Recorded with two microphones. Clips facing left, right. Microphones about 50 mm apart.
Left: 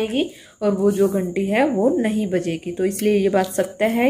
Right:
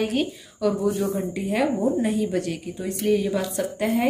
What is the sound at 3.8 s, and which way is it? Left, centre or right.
Speech, left.